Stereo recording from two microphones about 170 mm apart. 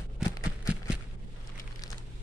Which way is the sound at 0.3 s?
20° left (ahead or behind).